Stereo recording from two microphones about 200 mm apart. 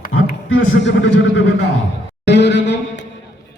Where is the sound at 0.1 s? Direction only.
90° left.